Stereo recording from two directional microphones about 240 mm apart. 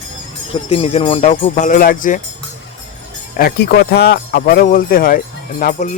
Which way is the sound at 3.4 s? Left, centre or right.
Left.